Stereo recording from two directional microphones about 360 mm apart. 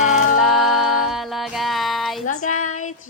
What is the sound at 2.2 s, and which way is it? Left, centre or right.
Child singing, left.